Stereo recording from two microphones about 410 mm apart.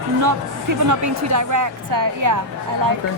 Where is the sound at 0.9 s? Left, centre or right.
Right.